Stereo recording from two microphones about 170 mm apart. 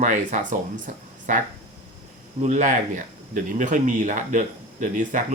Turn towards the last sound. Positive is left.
turn(degrees=-50)  # may be behind; listen again after turning